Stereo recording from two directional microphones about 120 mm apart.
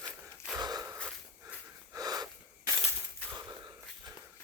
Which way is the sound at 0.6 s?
35° right (ahead or behind).